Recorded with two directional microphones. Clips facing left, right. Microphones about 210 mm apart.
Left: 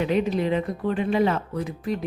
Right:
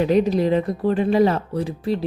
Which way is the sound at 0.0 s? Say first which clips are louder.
Right 5 dB; 40° right (ahead or behind).